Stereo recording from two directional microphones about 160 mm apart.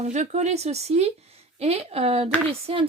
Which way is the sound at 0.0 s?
45° right (ahead or behind).